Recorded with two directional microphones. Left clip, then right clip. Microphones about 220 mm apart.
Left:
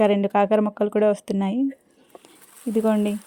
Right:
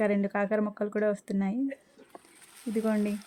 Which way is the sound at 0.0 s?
30° left (ahead or behind).